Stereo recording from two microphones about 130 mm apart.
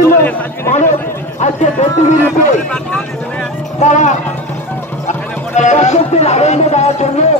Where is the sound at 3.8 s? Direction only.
65° left (ahead or behind).